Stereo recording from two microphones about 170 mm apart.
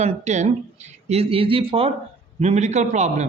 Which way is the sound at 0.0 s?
40° right (ahead or behind).